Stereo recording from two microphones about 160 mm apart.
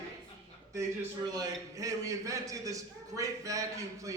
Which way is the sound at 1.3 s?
20° right (ahead or behind).